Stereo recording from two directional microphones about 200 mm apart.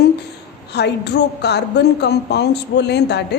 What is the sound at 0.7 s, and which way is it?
A woman's voice, 55° left (ahead or behind).